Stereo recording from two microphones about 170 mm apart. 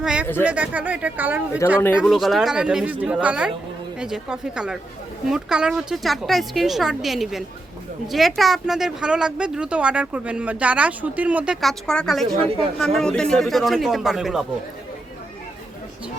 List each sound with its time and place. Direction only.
0.0 s speech: 5° right (ahead or behind)
1.6 s speech: 15° left (ahead or behind)
2.0 s speech: centre (ahead or behind)